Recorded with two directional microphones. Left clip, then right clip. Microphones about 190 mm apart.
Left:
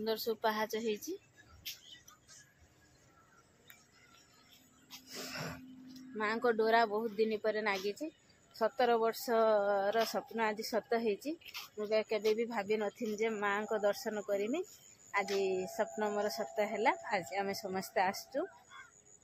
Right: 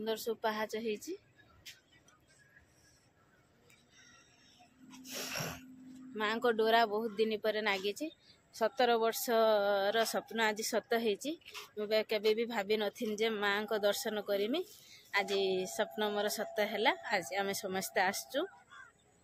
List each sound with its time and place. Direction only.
0.0 s speech: 15° left (ahead or behind)
5.3 s a sound: 10° right (ahead or behind)
6.1 s speech: 5° right (ahead or behind)